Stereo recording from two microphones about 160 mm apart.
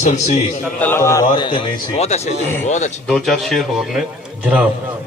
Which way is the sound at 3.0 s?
5° left (ahead or behind).